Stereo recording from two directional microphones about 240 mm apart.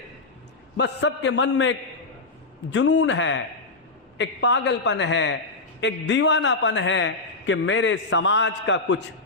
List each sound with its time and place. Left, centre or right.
0.8 s a man's voice: left
2.7 s a man's voice: left